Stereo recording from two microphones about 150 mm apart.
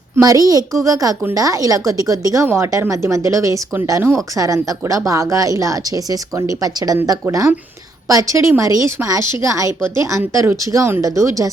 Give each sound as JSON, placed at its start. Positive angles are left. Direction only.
{"t": 0.2, "sound": "a woman's voice", "side_deg": -25}